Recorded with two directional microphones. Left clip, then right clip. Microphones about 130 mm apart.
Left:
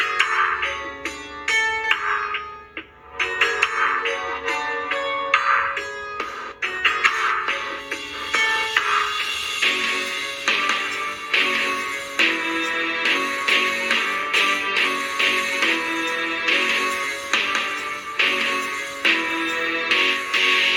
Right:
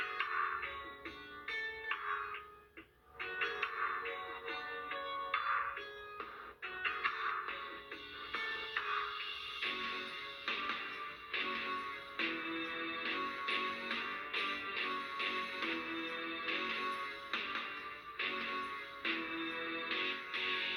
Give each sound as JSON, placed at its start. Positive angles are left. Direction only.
{"t": 0.0, "sound": "music", "side_deg": 25}
{"t": 3.2, "sound": "music", "side_deg": 25}